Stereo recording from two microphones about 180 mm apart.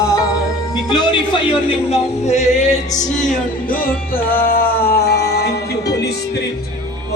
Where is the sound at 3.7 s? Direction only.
55° left (ahead or behind).